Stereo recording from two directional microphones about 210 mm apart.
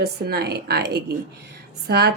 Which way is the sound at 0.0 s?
50° right (ahead or behind).